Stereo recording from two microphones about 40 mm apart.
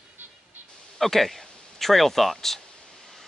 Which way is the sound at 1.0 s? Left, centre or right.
Centre.